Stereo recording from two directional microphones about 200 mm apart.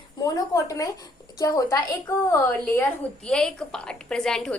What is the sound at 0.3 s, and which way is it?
A woman's voice, 15° left (ahead or behind).